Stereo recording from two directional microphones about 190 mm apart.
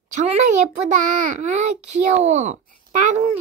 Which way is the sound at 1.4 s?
40° right (ahead or behind).